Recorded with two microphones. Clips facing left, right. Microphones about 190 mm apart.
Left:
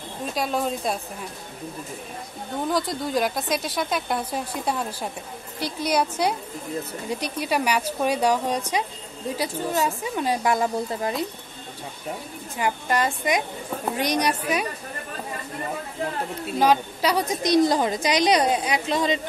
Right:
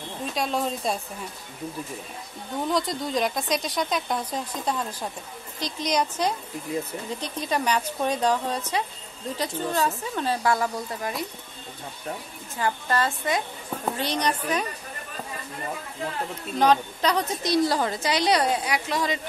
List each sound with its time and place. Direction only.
0.3 s speech: centre (ahead or behind)
2.7 s a woman's voice: centre (ahead or behind); by 11.2 s 25° left (ahead or behind)
12.5 s a woman's voice: 15° left (ahead or behind)
16.5 s a woman's voice: 10° left (ahead or behind)